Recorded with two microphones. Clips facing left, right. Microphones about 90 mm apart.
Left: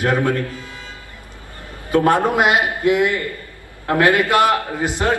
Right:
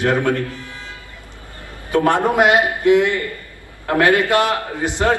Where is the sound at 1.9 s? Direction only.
25° right (ahead or behind).